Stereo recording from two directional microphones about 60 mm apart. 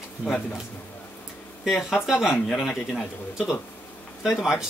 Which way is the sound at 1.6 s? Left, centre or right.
Centre.